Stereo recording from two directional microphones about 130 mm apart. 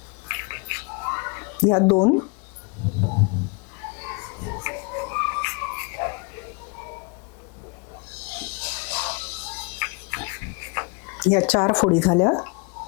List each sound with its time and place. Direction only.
0.3 s whispering: 20° left (ahead or behind)
1.7 s speech: 25° left (ahead or behind)
3.0 s a sound: 30° left (ahead or behind)
8.4 s music: 15° left (ahead or behind)
9.7 s a sound: 20° left (ahead or behind)
11.5 s speech: 25° left (ahead or behind)